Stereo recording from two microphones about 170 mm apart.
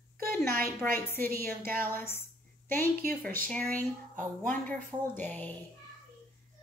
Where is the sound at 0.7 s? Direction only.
15° left (ahead or behind).